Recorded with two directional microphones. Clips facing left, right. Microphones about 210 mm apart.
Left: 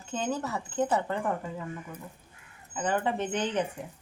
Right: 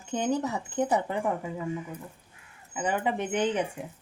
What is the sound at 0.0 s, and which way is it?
Speech, 15° right (ahead or behind).